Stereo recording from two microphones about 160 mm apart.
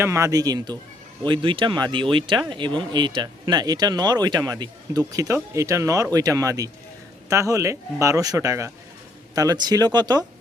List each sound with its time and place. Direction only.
0.0 s speech: 15° right (ahead or behind)